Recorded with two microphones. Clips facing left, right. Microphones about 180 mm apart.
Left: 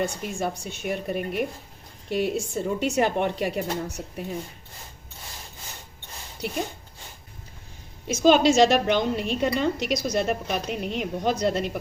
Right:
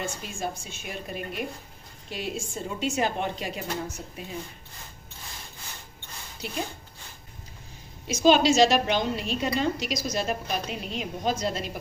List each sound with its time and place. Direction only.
0.0 s a woman's voice: 65° left (ahead or behind)
6.4 s a woman's voice: 60° left (ahead or behind)
8.0 s a woman's voice: 50° left (ahead or behind)